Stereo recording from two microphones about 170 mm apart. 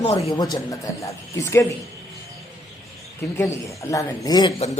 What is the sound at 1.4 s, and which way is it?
Speech, 15° left (ahead or behind).